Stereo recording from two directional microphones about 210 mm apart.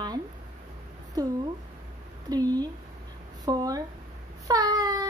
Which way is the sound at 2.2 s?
20° right (ahead or behind).